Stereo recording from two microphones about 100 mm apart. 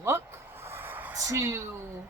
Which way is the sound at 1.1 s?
30° right (ahead or behind).